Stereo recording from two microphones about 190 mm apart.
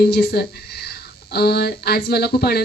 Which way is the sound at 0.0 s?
60° left (ahead or behind).